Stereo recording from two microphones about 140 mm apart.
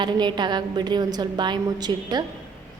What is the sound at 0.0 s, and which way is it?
A woman's voice, 30° right (ahead or behind).